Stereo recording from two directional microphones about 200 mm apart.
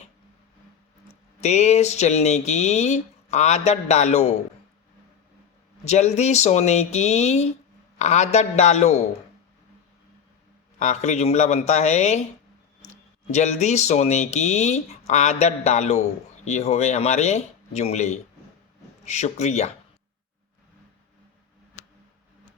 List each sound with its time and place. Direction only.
1.4 s speech: 35° left (ahead or behind)
5.8 s speech: 35° left (ahead or behind)
10.8 s speech: 35° left (ahead or behind)